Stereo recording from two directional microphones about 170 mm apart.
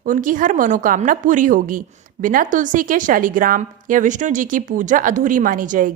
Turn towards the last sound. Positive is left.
turn(degrees=-50)  # may be behind; listen again after turning